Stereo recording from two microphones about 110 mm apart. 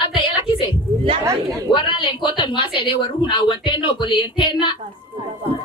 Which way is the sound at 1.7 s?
50° left (ahead or behind).